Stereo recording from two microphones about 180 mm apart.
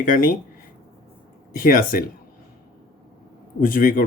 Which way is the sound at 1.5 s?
50° left (ahead or behind).